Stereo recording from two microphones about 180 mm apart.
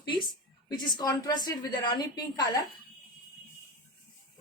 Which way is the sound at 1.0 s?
20° left (ahead or behind).